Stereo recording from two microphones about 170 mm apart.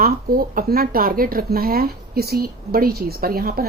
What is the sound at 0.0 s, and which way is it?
Speech, 60° right (ahead or behind).